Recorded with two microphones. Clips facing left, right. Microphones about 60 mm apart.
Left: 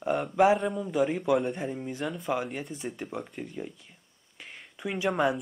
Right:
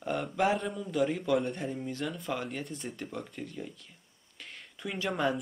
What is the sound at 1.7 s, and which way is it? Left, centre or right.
Speech, centre.